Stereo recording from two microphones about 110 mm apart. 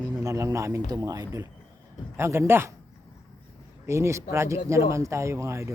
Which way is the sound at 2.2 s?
25° right (ahead or behind).